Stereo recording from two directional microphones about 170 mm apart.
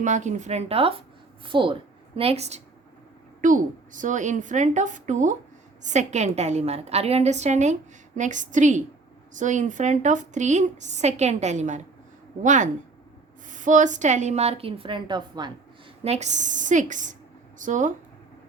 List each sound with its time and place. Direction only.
0.0 s a woman's voice: 45° right (ahead or behind)
3.4 s a woman's voice: 50° right (ahead or behind); by 15.5 s 25° right (ahead or behind)
16.0 s a woman's voice: 40° right (ahead or behind)